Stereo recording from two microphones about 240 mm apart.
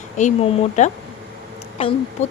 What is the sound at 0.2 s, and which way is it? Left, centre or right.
Speech, left.